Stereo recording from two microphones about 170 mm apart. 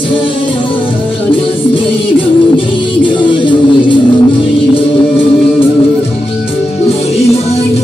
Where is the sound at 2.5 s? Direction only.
30° left (ahead or behind).